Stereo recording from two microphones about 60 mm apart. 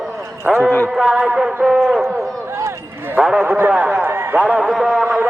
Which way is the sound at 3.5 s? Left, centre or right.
Right.